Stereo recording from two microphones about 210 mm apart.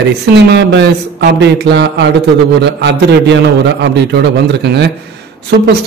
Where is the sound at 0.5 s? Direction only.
55° right (ahead or behind).